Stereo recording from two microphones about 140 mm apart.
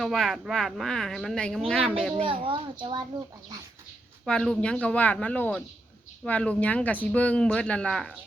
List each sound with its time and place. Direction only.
0.0 s speech: centre (ahead or behind)
2.1 s a child's voice: 40° right (ahead or behind)
4.3 s speech: 5° left (ahead or behind)